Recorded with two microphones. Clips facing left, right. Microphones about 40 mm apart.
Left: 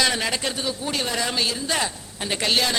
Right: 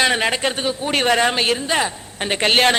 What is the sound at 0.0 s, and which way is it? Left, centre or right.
A man's voice, right.